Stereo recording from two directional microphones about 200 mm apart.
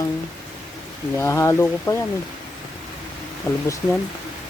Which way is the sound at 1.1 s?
10° left (ahead or behind).